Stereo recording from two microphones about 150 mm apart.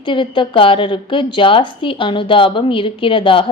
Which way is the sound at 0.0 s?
35° left (ahead or behind).